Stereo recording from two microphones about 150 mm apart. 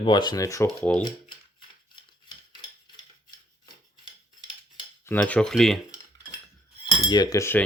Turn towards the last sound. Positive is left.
turn(degrees=15)  # may be behind; listen again after turning